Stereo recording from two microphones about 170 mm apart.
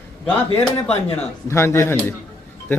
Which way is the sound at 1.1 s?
15° left (ahead or behind).